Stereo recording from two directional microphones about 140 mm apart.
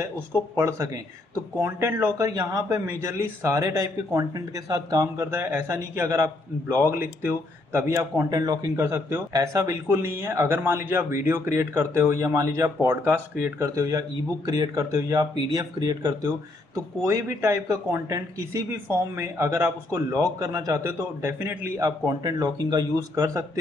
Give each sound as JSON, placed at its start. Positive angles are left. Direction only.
{"t": 0.6, "sound": "speech", "side_deg": -20}